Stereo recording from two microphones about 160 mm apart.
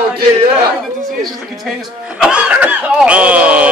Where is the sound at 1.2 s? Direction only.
Centre (ahead or behind).